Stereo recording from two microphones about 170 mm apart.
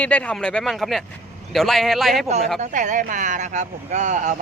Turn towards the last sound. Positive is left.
turn(degrees=-45)  # may be behind; listen again after turning